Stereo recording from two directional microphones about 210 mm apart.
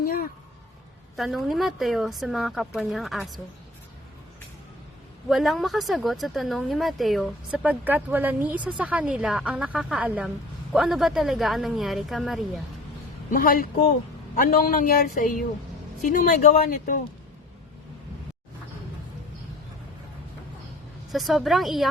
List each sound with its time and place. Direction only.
0.0 s a sound: 45° left (ahead or behind)
1.1 s speech: centre (ahead or behind)
5.3 s speech: centre (ahead or behind)
13.3 s a man's voice: 40° left (ahead or behind)
21.1 s speech: centre (ahead or behind)